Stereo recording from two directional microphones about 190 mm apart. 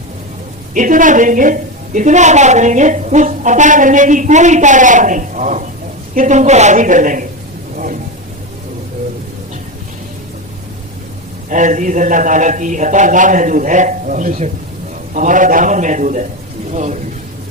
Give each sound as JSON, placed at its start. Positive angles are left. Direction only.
{"t": 0.7, "sound": "a woman's voice", "side_deg": -45}
{"t": 11.4, "sound": "a woman's voice", "side_deg": -40}